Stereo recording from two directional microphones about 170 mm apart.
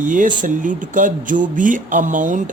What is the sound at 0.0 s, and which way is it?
Speech, 50° right (ahead or behind).